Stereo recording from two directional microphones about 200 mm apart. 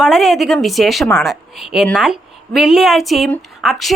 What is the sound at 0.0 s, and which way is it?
Speech, centre (ahead or behind).